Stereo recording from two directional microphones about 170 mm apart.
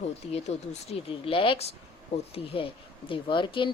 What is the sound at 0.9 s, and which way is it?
A woman's voice, 30° left (ahead or behind).